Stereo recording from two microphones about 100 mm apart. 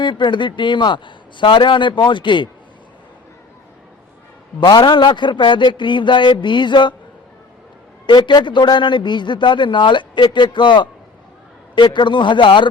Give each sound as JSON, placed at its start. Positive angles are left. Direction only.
{"t": 0.0, "sound": "a man's voice", "side_deg": 50}
{"t": 4.6, "sound": "a man's voice", "side_deg": 50}
{"t": 8.0, "sound": "a man's voice", "side_deg": 50}